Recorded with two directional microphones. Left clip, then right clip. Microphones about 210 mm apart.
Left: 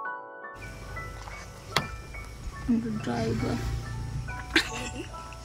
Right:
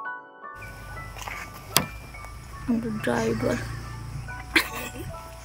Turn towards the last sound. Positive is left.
turn(degrees=0)  # may be behind; listen again after turning